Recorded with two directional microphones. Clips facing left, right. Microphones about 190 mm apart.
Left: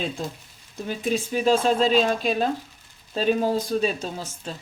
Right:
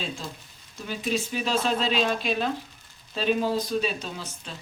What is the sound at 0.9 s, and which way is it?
Speech, 50° left (ahead or behind).